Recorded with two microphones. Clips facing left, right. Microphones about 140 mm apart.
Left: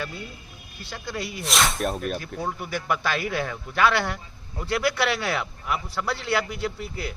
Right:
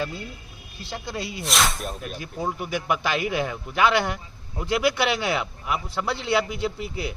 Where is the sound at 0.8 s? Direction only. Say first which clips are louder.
Right 1 dB; 30° right (ahead or behind).